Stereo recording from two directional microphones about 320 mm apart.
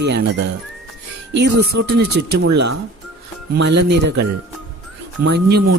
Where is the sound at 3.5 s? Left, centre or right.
Right.